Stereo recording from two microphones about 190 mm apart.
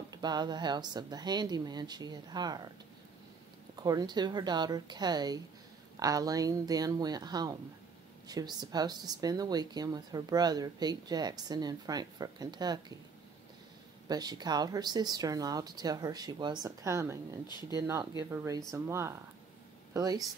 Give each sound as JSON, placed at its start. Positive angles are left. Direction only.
{"t": 0.1, "sound": "speech", "side_deg": -20}
{"t": 3.7, "sound": "speech", "side_deg": -20}
{"t": 14.0, "sound": "speech", "side_deg": -20}
{"t": 17.5, "sound": "speech", "side_deg": 20}
{"t": 17.7, "sound": "speech", "side_deg": -15}